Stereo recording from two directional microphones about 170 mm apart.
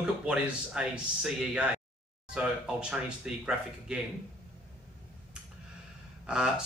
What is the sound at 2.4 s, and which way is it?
Speech, 5° right (ahead or behind).